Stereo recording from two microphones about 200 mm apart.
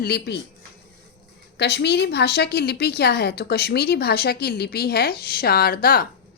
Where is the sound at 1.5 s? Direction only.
55° left (ahead or behind).